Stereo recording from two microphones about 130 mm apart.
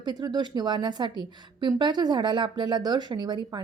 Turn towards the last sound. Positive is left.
turn(degrees=-35)  # may be behind; listen again after turning